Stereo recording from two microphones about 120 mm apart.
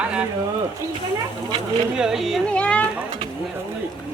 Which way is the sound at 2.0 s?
Centre (ahead or behind).